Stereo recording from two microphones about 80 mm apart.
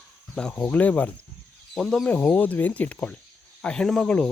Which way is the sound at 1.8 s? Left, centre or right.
Centre.